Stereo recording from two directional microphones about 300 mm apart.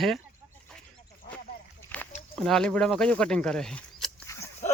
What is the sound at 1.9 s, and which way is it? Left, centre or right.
Snake, centre.